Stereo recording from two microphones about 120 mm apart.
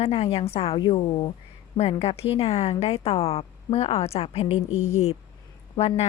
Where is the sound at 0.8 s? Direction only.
45° left (ahead or behind).